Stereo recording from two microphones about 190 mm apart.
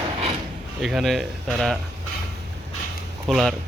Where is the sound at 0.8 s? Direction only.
Centre (ahead or behind).